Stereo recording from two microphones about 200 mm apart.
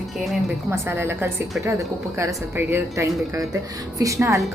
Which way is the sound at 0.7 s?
10° right (ahead or behind).